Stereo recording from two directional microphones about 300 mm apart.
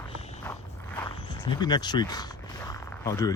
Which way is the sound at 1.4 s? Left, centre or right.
Centre.